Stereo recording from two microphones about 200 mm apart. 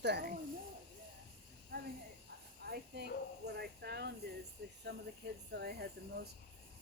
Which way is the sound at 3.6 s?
55° right (ahead or behind).